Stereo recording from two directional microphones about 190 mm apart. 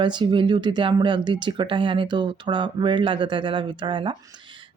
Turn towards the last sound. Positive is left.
turn(degrees=-25)  # may be behind; listen again after turning